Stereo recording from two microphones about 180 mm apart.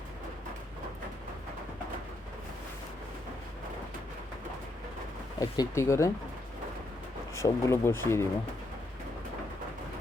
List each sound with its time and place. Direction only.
5.4 s speech: 20° left (ahead or behind)
7.3 s speech: 15° left (ahead or behind)